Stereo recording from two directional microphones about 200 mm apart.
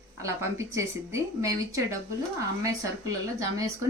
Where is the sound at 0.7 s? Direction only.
15° right (ahead or behind).